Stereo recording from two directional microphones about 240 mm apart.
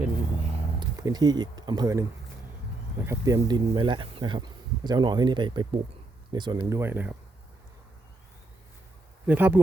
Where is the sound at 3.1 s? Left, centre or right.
Centre.